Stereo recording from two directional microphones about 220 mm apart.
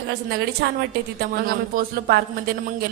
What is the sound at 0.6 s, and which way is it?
A woman's voice, 50° right (ahead or behind).